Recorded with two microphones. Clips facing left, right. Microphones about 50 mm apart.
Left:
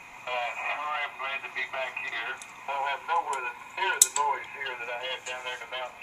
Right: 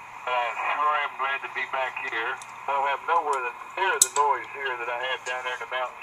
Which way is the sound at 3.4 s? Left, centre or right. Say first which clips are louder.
Right 4 dB; centre.